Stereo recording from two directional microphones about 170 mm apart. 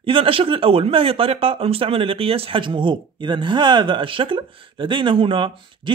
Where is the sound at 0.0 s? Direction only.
30° right (ahead or behind).